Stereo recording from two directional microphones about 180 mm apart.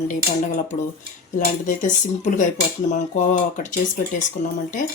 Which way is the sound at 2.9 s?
40° left (ahead or behind).